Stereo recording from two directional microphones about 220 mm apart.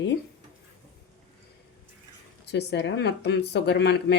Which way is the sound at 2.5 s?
50° left (ahead or behind).